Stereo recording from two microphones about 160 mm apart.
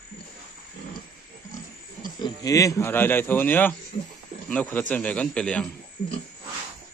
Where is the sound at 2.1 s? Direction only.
25° left (ahead or behind); by 5.6 s 5° left (ahead or behind).